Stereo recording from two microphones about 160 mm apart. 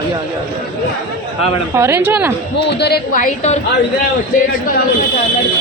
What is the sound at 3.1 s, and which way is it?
Speech, 50° left (ahead or behind).